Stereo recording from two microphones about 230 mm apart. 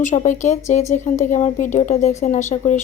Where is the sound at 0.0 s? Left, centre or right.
Left.